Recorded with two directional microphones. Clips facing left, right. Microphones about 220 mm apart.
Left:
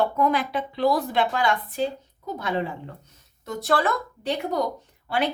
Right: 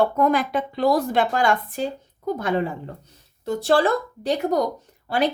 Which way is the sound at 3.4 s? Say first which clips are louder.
Right 5 dB; 30° right (ahead or behind).